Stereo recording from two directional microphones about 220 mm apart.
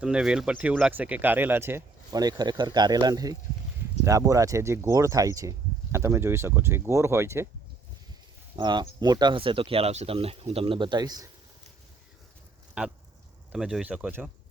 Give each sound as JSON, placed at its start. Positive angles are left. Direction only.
{"t": 0.0, "sound": "speech", "side_deg": -5}
{"t": 8.5, "sound": "speech", "side_deg": -20}
{"t": 12.8, "sound": "speech", "side_deg": -5}